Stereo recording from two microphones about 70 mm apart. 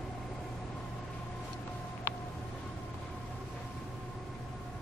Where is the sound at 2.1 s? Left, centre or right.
Left.